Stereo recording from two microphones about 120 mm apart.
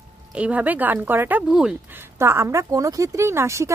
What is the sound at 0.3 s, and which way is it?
Speech, 10° right (ahead or behind).